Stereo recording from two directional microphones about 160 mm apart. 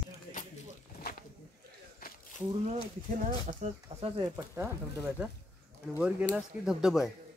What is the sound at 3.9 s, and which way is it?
Speech, 30° right (ahead or behind).